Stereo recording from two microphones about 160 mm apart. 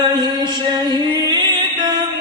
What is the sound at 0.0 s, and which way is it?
Music, 25° right (ahead or behind).